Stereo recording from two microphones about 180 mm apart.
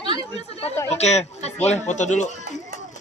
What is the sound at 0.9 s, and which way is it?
Speech, 35° left (ahead or behind).